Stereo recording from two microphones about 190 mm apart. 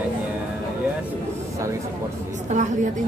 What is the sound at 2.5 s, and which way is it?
Speech, 40° right (ahead or behind).